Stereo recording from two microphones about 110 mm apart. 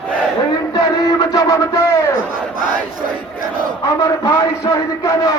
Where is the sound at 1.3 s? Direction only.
30° left (ahead or behind).